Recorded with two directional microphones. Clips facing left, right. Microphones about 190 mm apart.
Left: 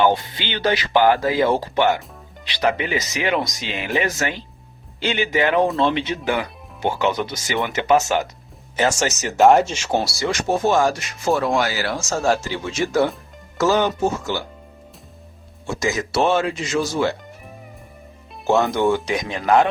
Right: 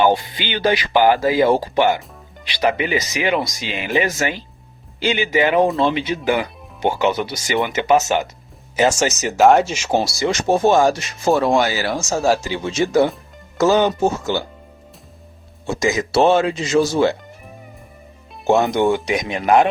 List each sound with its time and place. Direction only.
0.0 s speech: 10° right (ahead or behind)
8.9 s speech: 20° right (ahead or behind)
9.4 s speech: centre (ahead or behind)
9.7 s speech: 15° right (ahead or behind)
12.0 s speech: 10° right (ahead or behind)
15.6 s speech: 20° right (ahead or behind)
18.4 s speech: 20° right (ahead or behind)